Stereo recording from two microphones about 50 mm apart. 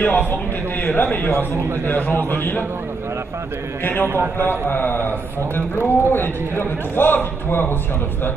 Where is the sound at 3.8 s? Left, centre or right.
Left.